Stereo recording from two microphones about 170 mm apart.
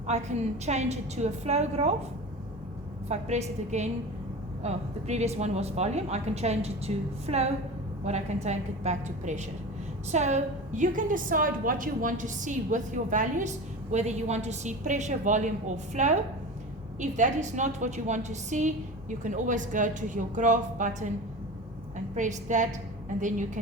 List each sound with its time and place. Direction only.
0.1 s speech: 40° right (ahead or behind)
3.1 s a woman's voice: 40° right (ahead or behind)
22.1 s a woman's voice: 45° right (ahead or behind)